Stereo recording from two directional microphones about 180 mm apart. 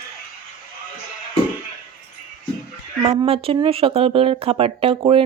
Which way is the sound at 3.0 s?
20° right (ahead or behind).